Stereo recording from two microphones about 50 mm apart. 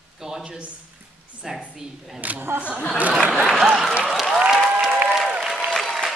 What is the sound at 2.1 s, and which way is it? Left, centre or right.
Speech, right.